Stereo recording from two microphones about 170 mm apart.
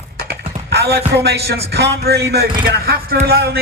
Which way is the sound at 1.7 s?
70° right (ahead or behind).